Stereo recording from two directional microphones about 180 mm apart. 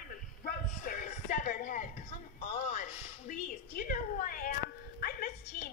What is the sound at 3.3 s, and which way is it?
Dog, 50° left (ahead or behind).